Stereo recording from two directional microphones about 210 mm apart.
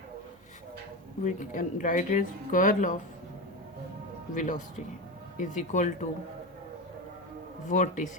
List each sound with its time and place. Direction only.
1.2 s speech: 35° left (ahead or behind)
4.4 s speech: 35° left (ahead or behind)
7.7 s speech: 35° left (ahead or behind)